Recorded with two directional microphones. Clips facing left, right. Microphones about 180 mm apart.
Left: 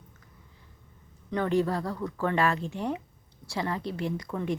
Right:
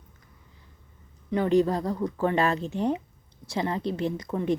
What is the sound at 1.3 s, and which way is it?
Speech, 15° right (ahead or behind).